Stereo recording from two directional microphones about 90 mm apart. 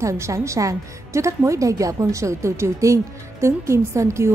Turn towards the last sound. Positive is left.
turn(degrees=-30)  # may be behind; listen again after turning